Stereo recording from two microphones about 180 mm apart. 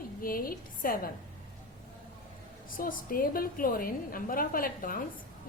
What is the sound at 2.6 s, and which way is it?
A woman's voice, 50° left (ahead or behind).